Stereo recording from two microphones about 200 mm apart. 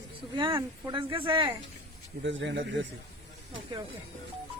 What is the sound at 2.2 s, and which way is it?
Speech, 65° right (ahead or behind).